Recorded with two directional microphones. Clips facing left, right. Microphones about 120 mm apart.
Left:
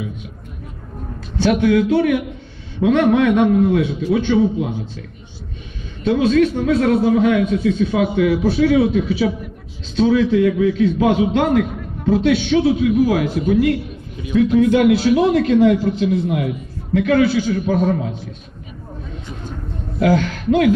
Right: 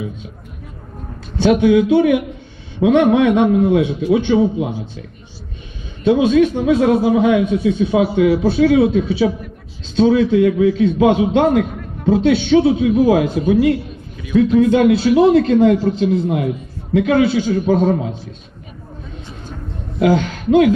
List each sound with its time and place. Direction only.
1.4 s a man's voice: 20° right (ahead or behind)
6.0 s a man's voice: 15° right (ahead or behind)
8.0 s a man's voice: 35° right (ahead or behind)
20.0 s speech: 20° right (ahead or behind)